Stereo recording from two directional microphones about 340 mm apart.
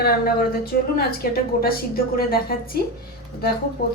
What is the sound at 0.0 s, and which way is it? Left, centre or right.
Speech, left.